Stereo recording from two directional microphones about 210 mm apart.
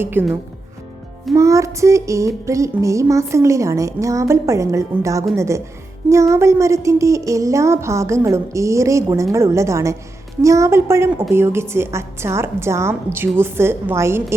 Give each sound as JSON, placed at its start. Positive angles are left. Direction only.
{"t": 0.0, "sound": "a woman's voice", "side_deg": -10}